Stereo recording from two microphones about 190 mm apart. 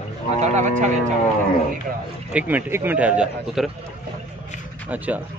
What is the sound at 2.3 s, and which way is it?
Speech, 10° right (ahead or behind).